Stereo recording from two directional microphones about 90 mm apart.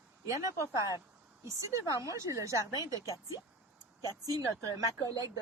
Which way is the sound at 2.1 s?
35° right (ahead or behind).